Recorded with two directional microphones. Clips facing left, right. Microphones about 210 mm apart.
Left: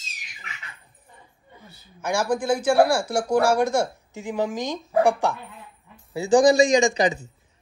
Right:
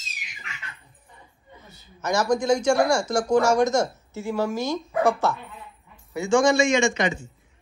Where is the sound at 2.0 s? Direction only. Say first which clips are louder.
Right 1 dB; 10° left (ahead or behind).